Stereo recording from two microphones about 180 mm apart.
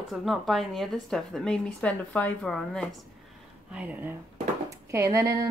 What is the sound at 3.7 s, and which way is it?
Speech, 10° right (ahead or behind).